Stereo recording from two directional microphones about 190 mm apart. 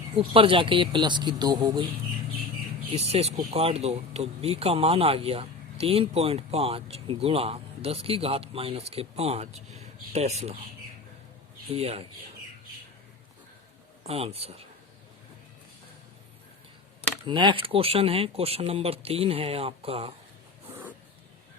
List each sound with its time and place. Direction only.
0.2 s speech: 30° right (ahead or behind)
2.9 s speech: 35° right (ahead or behind)
11.7 s speech: 30° right (ahead or behind)
14.0 s speech: 30° right (ahead or behind)
17.2 s speech: 25° right (ahead or behind)